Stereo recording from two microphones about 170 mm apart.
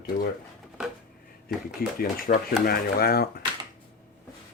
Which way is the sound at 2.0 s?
60° left (ahead or behind).